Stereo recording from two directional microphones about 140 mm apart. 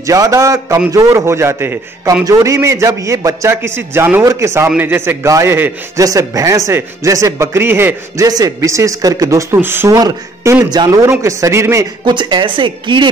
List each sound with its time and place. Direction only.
0.0 s a man's voice: 25° right (ahead or behind)